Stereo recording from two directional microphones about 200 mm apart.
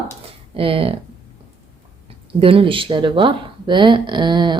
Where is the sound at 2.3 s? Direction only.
25° right (ahead or behind).